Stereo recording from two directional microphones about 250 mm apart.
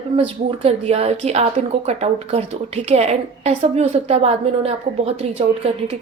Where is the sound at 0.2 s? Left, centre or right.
Right.